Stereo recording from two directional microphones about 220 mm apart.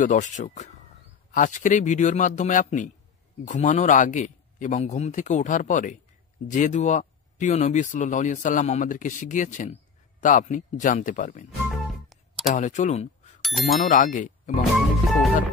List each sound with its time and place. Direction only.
0.0 s speech: 35° left (ahead or behind)
11.7 s music: centre (ahead or behind)
12.5 s speech: 35° left (ahead or behind)
13.4 s speech: centre (ahead or behind)
13.7 s speech: 35° left (ahead or behind)
14.6 s music: centre (ahead or behind)